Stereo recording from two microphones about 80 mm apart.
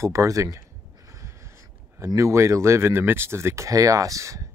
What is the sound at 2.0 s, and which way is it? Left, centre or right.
Speech, right.